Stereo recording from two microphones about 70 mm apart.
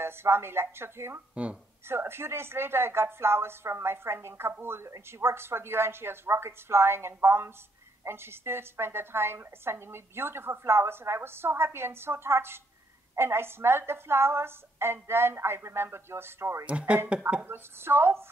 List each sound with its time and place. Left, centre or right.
0.0 s a woman's voice: right
1.3 s speech: centre
1.9 s a woman's voice: right
16.6 s speech: centre
17.5 s a woman's voice: right